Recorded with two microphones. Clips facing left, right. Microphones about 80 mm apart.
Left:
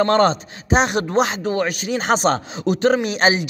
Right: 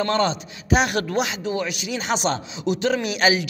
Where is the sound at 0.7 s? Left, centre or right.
Left.